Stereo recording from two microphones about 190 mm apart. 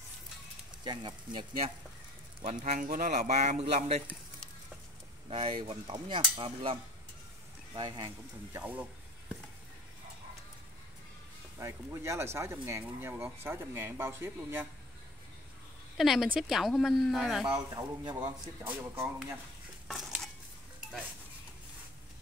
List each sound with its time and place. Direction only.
0.8 s speech: 25° right (ahead or behind)
2.4 s speech: 35° right (ahead or behind)
5.3 s speech: 30° right (ahead or behind)
8.5 s speech: 10° right (ahead or behind)
11.6 s speech: 15° right (ahead or behind)
16.0 s speech: centre (ahead or behind)
17.5 s speech: 20° right (ahead or behind)
19.9 s a sound: centre (ahead or behind)